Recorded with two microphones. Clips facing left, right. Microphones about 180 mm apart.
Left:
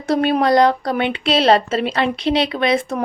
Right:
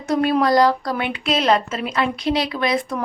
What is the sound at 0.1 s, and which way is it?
A woman's voice, 25° left (ahead or behind).